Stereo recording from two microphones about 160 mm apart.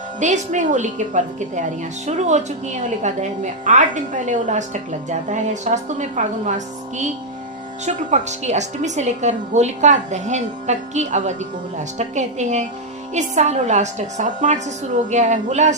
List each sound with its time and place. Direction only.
0.2 s a woman's voice: 50° right (ahead or behind)
7.9 s a woman's voice: 45° right (ahead or behind)